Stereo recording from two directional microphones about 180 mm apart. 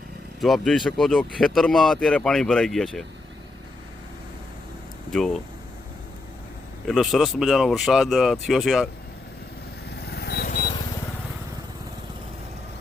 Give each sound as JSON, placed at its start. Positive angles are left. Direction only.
{"t": 0.4, "sound": "speech", "side_deg": 0}
{"t": 5.1, "sound": "speech", "side_deg": 0}
{"t": 6.8, "sound": "speech", "side_deg": 0}
{"t": 9.9, "sound": "vehicle", "side_deg": 65}